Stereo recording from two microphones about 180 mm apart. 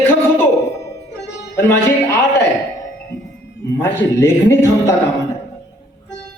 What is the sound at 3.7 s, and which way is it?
A man's voice, 10° left (ahead or behind).